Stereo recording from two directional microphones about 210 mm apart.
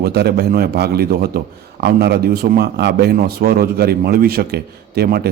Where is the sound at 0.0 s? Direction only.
50° right (ahead or behind).